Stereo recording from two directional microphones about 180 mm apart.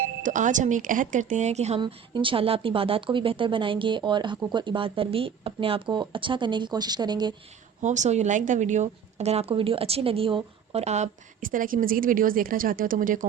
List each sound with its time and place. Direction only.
0.2 s speech: 45° right (ahead or behind)
1.8 s speech: 25° right (ahead or behind)
7.8 s a woman's voice: 40° right (ahead or behind)